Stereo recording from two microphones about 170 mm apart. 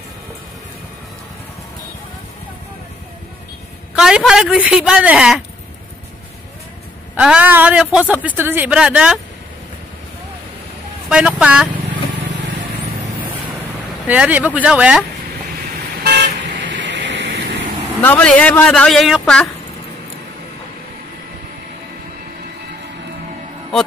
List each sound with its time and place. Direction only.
3.9 s a man's voice: 5° right (ahead or behind)
7.2 s a man's voice: 5° right (ahead or behind)
11.1 s a man's voice: 5° right (ahead or behind)
14.0 s a man's voice: 10° right (ahead or behind)
16.0 s vehicle: 90° right
18.0 s a man's voice: 10° left (ahead or behind)